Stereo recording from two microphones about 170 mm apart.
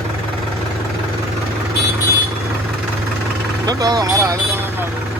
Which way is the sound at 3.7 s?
25° right (ahead or behind).